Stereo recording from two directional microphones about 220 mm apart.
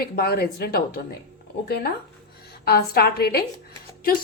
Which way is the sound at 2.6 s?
45° left (ahead or behind).